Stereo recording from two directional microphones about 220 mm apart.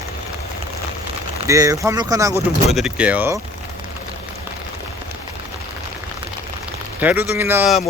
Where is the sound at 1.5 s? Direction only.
15° right (ahead or behind).